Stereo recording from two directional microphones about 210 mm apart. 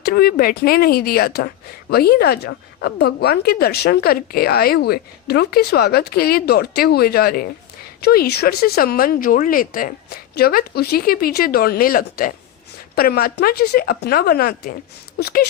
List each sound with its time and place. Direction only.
0.0 s a woman's voice: 45° left (ahead or behind)